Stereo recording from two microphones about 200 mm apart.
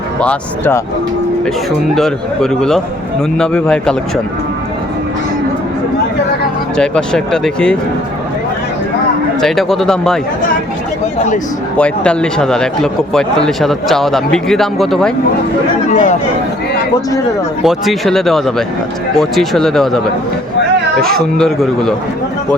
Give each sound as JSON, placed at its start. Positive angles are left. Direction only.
{"t": 0.2, "sound": "speech", "side_deg": 10}
{"t": 2.0, "sound": "speech", "side_deg": 5}
{"t": 6.7, "sound": "speech", "side_deg": 5}
{"t": 9.4, "sound": "speech", "side_deg": 0}
{"t": 11.8, "sound": "speech", "side_deg": 5}
{"t": 15.9, "sound": "speech", "side_deg": 35}
{"t": 17.6, "sound": "speech", "side_deg": 0}
{"t": 21.0, "sound": "speech", "side_deg": 0}